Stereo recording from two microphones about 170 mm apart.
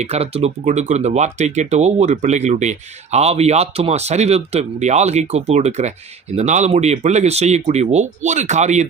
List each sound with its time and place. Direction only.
0.0 s speech: 40° right (ahead or behind)